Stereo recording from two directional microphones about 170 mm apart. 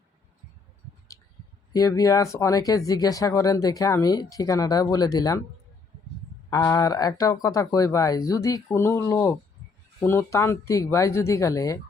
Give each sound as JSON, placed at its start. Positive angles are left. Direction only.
{"t": 1.7, "sound": "speech", "side_deg": 20}
{"t": 6.5, "sound": "speech", "side_deg": 20}